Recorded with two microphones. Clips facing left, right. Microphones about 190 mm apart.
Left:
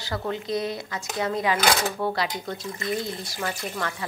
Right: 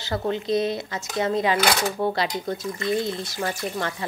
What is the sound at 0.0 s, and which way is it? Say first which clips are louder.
Speech: right 4 dB; 25° right (ahead or behind).